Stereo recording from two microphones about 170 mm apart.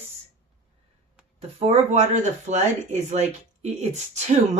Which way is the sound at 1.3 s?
35° right (ahead or behind).